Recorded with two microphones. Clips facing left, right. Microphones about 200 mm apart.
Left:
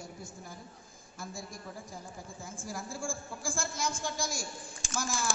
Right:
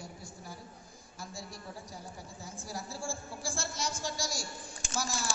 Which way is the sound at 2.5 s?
50° left (ahead or behind).